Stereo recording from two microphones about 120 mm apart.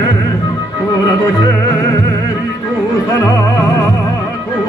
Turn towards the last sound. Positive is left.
turn(degrees=30)  # may be behind; listen again after turning